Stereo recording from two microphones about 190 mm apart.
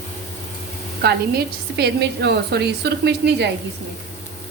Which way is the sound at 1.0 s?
60° right (ahead or behind).